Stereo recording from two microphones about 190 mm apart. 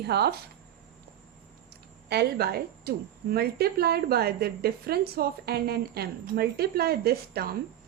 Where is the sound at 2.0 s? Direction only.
55° right (ahead or behind).